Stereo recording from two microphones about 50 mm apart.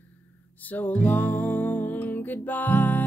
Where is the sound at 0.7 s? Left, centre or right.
Left.